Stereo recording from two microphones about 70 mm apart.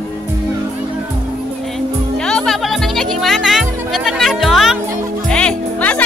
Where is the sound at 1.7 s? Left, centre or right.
Centre.